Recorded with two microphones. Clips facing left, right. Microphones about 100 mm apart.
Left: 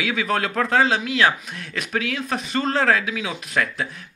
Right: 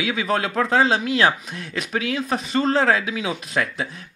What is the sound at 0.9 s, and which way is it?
Speech, 30° right (ahead or behind).